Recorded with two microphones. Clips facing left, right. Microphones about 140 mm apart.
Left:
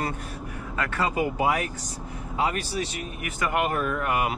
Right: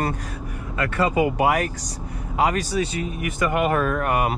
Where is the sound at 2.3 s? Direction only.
80° right.